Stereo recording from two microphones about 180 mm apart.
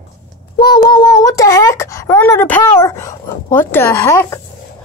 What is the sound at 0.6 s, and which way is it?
Child singing, 60° left (ahead or behind).